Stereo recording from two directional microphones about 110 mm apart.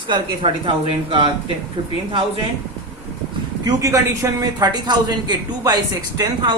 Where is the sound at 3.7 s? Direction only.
30° right (ahead or behind).